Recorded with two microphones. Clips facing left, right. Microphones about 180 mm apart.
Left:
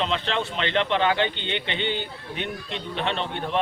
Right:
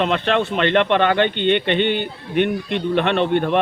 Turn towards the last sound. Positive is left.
turn(degrees=-60)  # may be behind; listen again after turning